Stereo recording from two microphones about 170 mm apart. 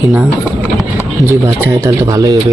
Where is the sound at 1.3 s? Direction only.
20° right (ahead or behind).